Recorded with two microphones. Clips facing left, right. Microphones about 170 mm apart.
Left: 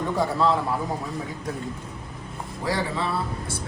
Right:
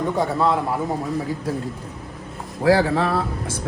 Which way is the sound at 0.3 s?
25° right (ahead or behind).